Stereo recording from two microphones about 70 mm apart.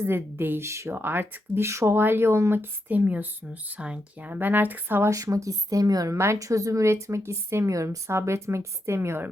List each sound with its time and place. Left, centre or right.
0.0 s speech: right
0.9 s speech: right
2.9 s speech: right
4.3 s speech: right
5.0 s speech: right
6.1 s speech: right